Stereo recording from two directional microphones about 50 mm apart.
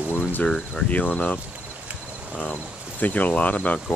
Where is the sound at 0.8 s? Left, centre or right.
Left.